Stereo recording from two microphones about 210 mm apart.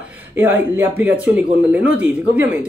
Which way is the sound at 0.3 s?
10° right (ahead or behind).